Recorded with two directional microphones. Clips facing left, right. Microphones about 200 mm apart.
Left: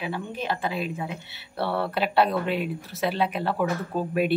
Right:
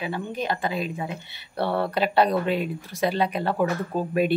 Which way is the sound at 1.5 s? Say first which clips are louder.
Right 2 dB; 15° right (ahead or behind).